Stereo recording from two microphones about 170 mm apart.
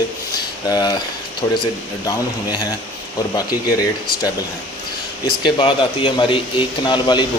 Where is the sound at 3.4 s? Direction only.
20° left (ahead or behind).